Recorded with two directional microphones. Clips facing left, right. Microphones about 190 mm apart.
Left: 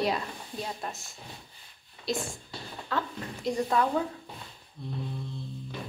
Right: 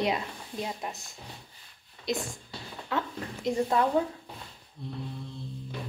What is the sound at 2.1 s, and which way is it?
Speech, 20° right (ahead or behind).